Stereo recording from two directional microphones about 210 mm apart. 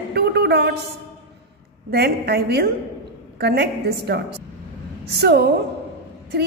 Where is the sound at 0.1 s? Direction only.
50° right (ahead or behind).